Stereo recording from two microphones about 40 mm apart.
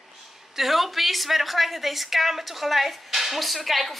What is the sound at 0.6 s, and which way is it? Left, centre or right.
A woman's voice, centre.